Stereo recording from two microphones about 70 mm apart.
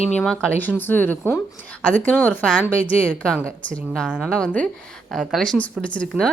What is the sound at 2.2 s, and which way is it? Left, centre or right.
Speech, left.